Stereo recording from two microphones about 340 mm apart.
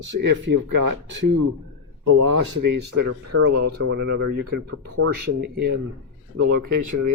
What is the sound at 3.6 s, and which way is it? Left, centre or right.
Speech, right.